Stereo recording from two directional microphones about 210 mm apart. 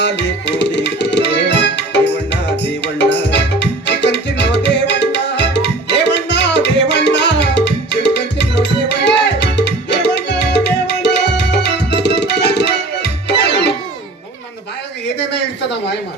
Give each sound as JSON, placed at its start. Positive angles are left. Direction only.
{"t": 0.0, "sound": "tabla", "side_deg": 55}
{"t": 9.4, "sound": "music", "side_deg": 55}